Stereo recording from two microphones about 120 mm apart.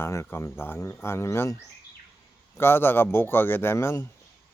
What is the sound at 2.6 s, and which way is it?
Speech, 20° left (ahead or behind).